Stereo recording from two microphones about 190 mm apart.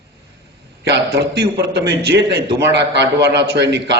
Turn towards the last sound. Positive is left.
turn(degrees=-65)  # may be behind; listen again after turning